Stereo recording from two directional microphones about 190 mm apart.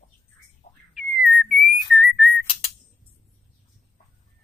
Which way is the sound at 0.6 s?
40° left (ahead or behind).